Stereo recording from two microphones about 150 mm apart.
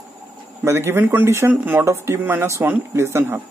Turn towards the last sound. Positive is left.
turn(degrees=-15)  # may be behind; listen again after turning